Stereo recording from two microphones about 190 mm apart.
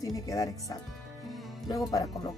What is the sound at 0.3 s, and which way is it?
Speech, 15° left (ahead or behind).